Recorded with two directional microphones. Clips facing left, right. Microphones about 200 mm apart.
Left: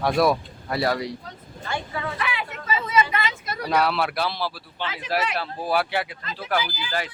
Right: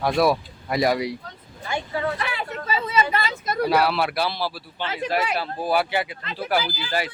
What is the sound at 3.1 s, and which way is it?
Vehicle, 35° right (ahead or behind).